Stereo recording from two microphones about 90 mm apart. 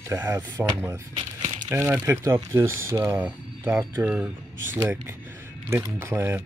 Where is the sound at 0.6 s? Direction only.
15° right (ahead or behind).